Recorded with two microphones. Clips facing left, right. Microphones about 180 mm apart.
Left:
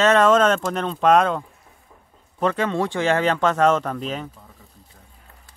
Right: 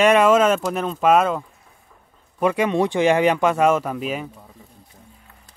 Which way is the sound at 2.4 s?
10° right (ahead or behind).